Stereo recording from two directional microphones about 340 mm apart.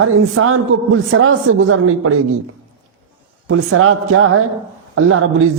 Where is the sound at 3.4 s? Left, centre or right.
Right.